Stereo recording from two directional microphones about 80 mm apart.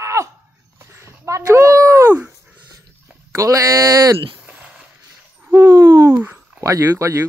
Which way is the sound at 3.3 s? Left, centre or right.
Right.